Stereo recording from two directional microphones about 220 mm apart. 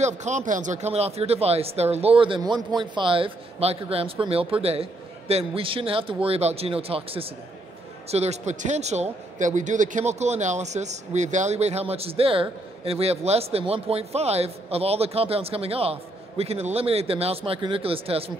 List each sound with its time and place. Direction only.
0.0 s a man's voice: 30° right (ahead or behind)